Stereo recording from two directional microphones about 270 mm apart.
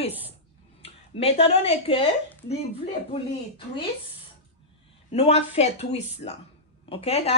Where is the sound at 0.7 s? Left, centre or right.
Left.